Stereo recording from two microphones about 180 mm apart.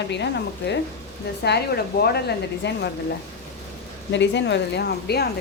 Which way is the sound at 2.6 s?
75° left (ahead or behind).